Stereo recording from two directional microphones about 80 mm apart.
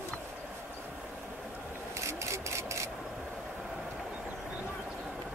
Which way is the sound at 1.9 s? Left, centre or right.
Right.